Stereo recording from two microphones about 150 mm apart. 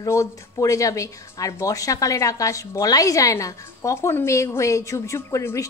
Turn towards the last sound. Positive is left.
turn(degrees=20)  # may be behind; listen again after turning